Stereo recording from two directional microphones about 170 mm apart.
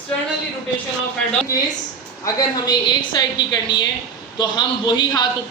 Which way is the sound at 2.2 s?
25° left (ahead or behind).